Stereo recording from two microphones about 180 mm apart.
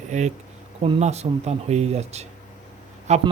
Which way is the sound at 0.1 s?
40° right (ahead or behind).